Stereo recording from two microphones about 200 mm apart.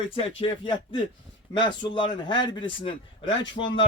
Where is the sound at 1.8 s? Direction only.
25° left (ahead or behind).